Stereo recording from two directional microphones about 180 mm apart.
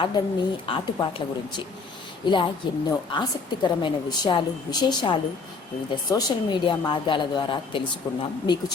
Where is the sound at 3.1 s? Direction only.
25° left (ahead or behind).